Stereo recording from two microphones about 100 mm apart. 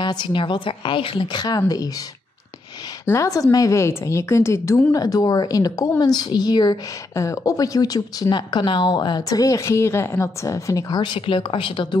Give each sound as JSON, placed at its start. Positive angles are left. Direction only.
{"t": 0.0, "sound": "a woman's voice", "side_deg": 50}
{"t": 3.1, "sound": "a woman's voice", "side_deg": 35}
{"t": 4.9, "sound": "speech", "side_deg": 40}
{"t": 7.2, "sound": "speech", "side_deg": 35}
{"t": 11.0, "sound": "a woman's voice", "side_deg": 60}